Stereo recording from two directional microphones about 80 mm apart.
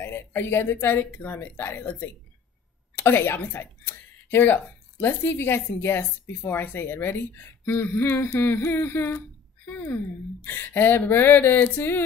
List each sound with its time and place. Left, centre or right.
0.0 s speech: left